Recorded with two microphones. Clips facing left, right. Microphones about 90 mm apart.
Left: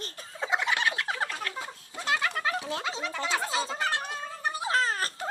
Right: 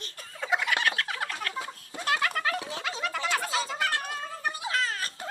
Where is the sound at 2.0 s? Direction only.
20° left (ahead or behind).